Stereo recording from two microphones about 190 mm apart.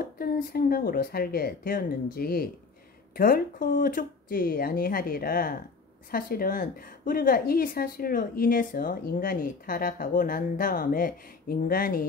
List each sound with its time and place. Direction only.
0.0 s a woman's voice: 50° left (ahead or behind)